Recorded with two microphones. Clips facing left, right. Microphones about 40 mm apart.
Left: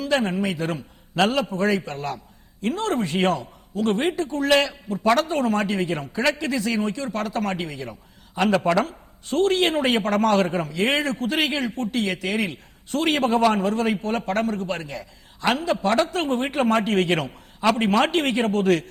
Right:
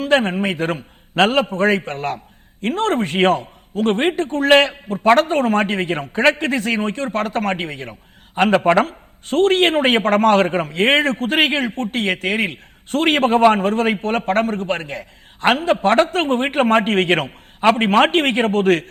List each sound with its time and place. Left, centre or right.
0.0 s speech: right